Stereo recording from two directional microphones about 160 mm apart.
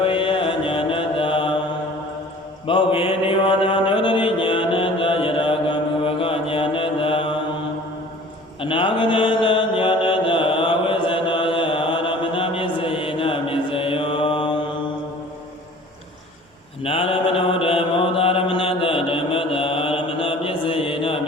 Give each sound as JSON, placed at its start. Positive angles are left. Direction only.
{"t": 0.0, "sound": "mantra", "side_deg": 35}
{"t": 2.6, "sound": "mantra", "side_deg": 35}
{"t": 8.6, "sound": "mantra", "side_deg": 30}
{"t": 16.8, "sound": "mantra", "side_deg": 35}